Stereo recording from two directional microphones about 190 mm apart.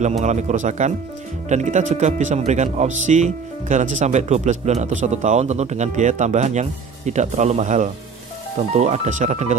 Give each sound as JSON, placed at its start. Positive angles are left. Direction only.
{"t": 0.2, "sound": "speech", "side_deg": -40}